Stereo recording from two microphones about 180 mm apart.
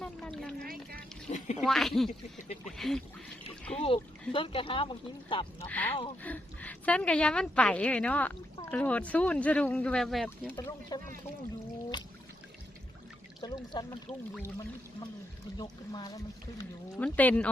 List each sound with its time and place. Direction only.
0.0 s a sound: 5° left (ahead or behind)
0.6 s speech: 55° right (ahead or behind)
1.3 s a sound: 40° left (ahead or behind)
1.6 s speech: centre (ahead or behind)
3.5 s a sound: 5° left (ahead or behind)
3.8 s speech: 30° left (ahead or behind)
5.6 s a woman's voice: 10° left (ahead or behind)
10.5 s speech: 25° left (ahead or behind)
13.4 s speech: 25° left (ahead or behind)
15.5 s speech: 20° left (ahead or behind)
17.0 s a woman's voice: 10° left (ahead or behind)